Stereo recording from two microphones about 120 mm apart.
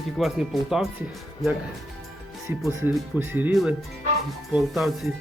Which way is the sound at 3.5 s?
Centre (ahead or behind).